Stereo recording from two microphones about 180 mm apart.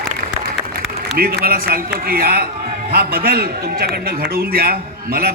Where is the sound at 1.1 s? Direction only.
60° right (ahead or behind).